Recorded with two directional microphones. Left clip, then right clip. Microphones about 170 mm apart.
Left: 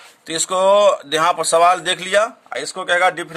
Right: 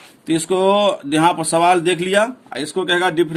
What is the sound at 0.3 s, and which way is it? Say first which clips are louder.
Speech: left 1 dB; 45° left (ahead or behind).